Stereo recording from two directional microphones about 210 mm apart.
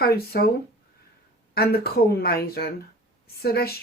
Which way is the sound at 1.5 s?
50° left (ahead or behind).